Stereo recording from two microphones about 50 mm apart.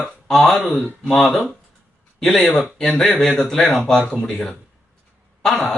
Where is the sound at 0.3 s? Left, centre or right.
Centre.